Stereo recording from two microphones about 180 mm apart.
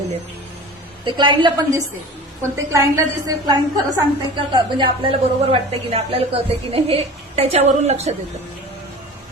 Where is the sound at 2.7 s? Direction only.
20° right (ahead or behind).